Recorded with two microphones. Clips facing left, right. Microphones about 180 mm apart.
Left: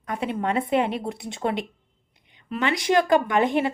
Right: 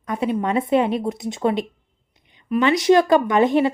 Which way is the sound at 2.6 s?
20° right (ahead or behind).